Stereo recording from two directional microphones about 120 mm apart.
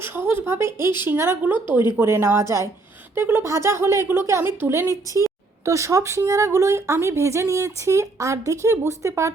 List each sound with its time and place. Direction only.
0.0 s a woman's voice: 20° right (ahead or behind)